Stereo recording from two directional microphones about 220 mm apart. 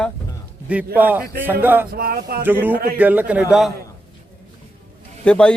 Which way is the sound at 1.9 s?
45° right (ahead or behind).